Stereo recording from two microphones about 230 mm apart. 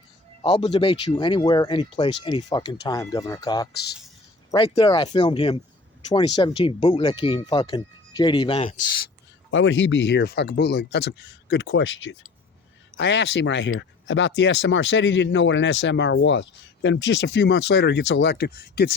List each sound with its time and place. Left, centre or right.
0.4 s speech: left
9.5 s speech: left